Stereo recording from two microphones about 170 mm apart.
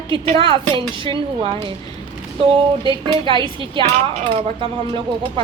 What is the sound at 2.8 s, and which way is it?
A woman's voice, 30° right (ahead or behind).